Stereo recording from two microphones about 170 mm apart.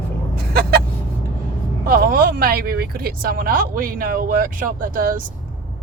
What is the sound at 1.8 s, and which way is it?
Speech, 55° right (ahead or behind).